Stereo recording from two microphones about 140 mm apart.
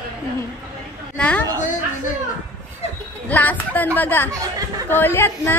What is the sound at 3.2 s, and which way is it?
A woman's voice, 10° left (ahead or behind).